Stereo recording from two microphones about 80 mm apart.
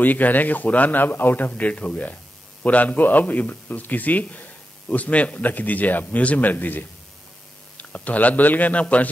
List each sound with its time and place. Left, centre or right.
0.0 s a man's voice: left